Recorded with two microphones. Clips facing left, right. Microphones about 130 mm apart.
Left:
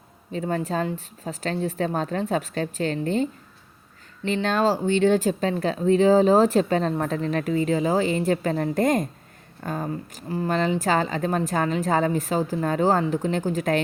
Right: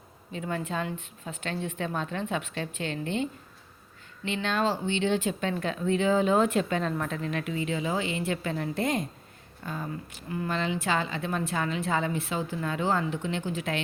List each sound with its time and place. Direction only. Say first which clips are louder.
0.3 s speech: left 6 dB; 35° left (ahead or behind)